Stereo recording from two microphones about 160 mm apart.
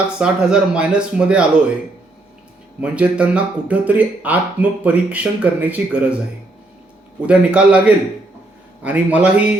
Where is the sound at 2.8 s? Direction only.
5° right (ahead or behind).